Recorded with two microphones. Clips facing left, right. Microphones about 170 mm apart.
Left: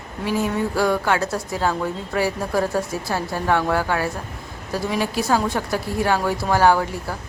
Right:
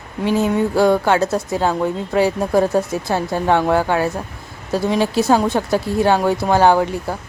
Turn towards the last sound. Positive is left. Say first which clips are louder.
# right 5 dB
turn(degrees=-20)  # may be behind; listen again after turning